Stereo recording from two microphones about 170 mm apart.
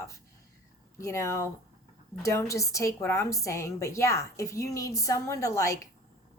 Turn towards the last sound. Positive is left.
turn(degrees=20)  # may be behind; listen again after turning